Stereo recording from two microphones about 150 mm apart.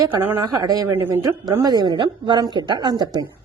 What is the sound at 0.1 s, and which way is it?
Speech, 15° right (ahead or behind).